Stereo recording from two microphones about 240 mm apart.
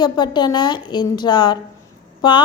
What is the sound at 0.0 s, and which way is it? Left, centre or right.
A woman's voice, centre.